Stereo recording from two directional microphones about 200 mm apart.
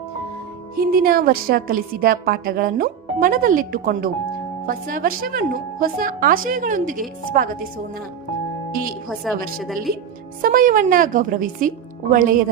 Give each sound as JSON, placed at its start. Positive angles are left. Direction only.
{"t": 0.8, "sound": "a woman's voice", "side_deg": -50}
{"t": 9.0, "sound": "a woman's voice", "side_deg": 0}
{"t": 10.4, "sound": "a woman's voice", "side_deg": -45}